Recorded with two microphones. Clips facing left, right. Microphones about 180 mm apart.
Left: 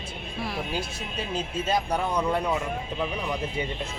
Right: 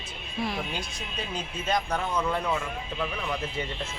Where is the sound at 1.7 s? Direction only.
15° left (ahead or behind).